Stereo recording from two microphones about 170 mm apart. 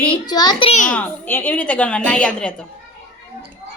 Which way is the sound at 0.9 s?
10° left (ahead or behind).